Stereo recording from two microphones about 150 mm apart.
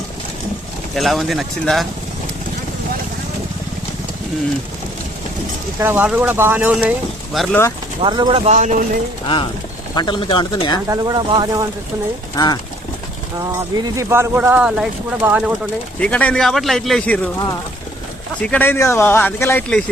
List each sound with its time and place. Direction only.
0.9 s speech: centre (ahead or behind)
5.8 s speech: 10° right (ahead or behind)
8.0 s speech: 30° right (ahead or behind)
8.4 s speech: 55° right (ahead or behind)
9.2 s speech: 35° left (ahead or behind)
10.8 s speech: 25° right (ahead or behind)
12.4 s speech: 25° left (ahead or behind)
13.4 s speech: 25° right (ahead or behind); by 15.5 s 10° right (ahead or behind)
16.0 s speech: 10° left (ahead or behind)
18.3 s speech: 10° left (ahead or behind)